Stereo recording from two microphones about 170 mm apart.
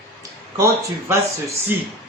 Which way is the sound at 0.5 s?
15° right (ahead or behind).